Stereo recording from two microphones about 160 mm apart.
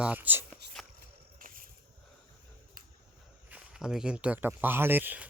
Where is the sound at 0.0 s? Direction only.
10° right (ahead or behind).